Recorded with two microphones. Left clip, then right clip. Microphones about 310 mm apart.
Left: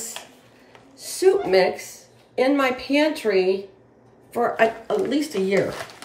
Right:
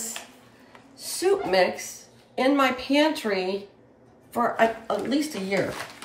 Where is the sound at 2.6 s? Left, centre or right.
Right.